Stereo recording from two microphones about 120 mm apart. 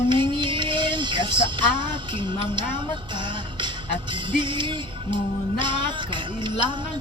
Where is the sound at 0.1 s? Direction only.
40° right (ahead or behind).